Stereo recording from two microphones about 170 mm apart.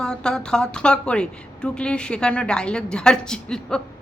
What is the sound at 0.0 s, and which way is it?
A woman's voice, 5° left (ahead or behind).